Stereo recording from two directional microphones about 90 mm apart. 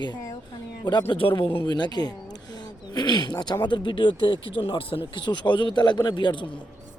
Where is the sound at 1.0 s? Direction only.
80° left; by 6.6 s 65° left (ahead or behind).